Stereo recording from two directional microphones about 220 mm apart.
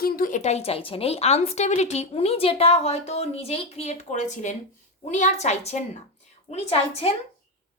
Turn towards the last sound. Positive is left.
turn(degrees=25)  # may be behind; listen again after turning